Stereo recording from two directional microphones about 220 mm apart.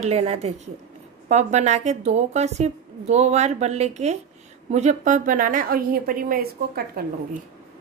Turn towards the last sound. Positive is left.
turn(degrees=-45)  # may be behind; listen again after turning